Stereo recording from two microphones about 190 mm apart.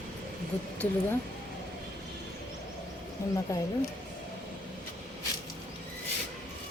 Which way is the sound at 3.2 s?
15° left (ahead or behind).